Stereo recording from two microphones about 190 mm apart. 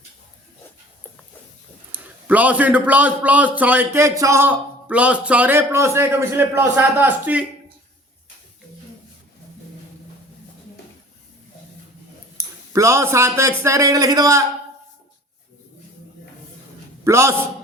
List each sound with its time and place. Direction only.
1.9 s a man's voice: 10° right (ahead or behind)
12.7 s a man's voice: 15° right (ahead or behind)
17.0 s a man's voice: 15° right (ahead or behind)